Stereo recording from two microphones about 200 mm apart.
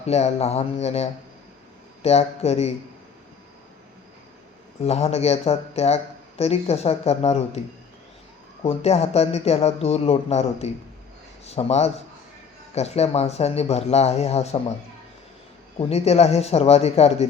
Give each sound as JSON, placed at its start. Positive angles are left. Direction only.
{"t": 0.0, "sound": "speech", "side_deg": 30}
{"t": 4.8, "sound": "speech", "side_deg": 30}
{"t": 8.6, "sound": "speech", "side_deg": 30}
{"t": 15.8, "sound": "speech", "side_deg": 30}